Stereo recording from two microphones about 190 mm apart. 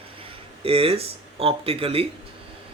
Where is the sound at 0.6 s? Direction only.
30° right (ahead or behind).